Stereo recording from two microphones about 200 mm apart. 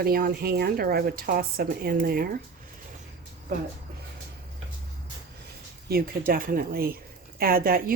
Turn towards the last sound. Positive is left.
turn(degrees=-45)  # may be behind; listen again after turning